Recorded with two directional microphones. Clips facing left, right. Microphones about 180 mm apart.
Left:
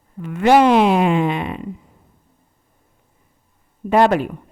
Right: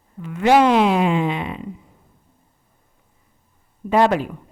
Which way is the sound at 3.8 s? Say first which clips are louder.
Left 2 dB; 55° left (ahead or behind).